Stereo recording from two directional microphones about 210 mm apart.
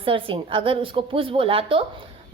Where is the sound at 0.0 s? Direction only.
25° right (ahead or behind).